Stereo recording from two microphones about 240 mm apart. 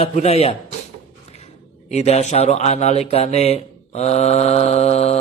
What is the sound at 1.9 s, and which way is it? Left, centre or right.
A man's voice, left.